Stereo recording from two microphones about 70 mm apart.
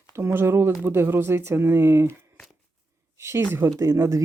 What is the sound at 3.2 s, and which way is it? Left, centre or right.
Speech, right.